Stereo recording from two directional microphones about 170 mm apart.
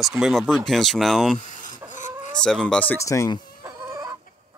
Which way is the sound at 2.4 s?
5° left (ahead or behind).